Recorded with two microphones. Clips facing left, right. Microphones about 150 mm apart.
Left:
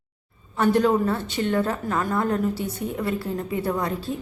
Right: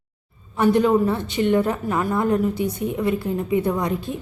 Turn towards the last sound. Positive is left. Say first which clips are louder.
# right 4 dB
turn(degrees=-15)  # may be behind; listen again after turning